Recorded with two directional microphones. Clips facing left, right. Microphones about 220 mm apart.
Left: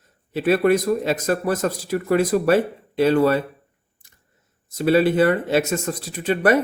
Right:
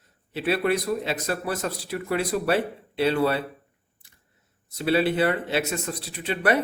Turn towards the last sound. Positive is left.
turn(degrees=45)  # may be behind; listen again after turning